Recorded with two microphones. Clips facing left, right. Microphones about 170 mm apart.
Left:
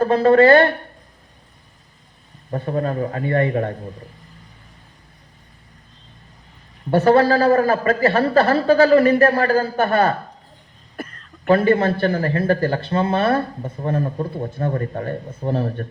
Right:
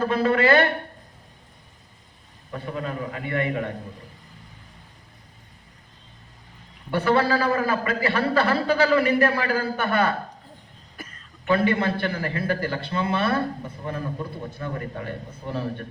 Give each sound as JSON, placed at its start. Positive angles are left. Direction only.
{"t": 0.0, "sound": "a man's voice", "side_deg": 45}
{"t": 2.5, "sound": "a man's voice", "side_deg": 40}
{"t": 6.9, "sound": "a man's voice", "side_deg": 45}